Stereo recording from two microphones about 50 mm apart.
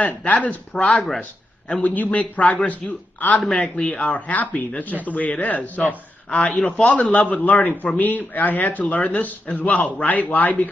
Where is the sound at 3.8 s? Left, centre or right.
Left.